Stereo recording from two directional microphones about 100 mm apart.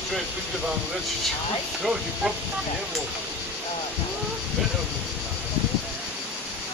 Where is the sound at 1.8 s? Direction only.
5° right (ahead or behind).